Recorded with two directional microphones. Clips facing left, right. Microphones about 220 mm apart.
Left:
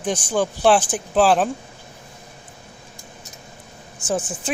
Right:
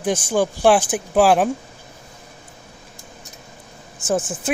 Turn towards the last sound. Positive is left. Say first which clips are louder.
# right 3 dB
turn(degrees=-5)  # may be behind; listen again after turning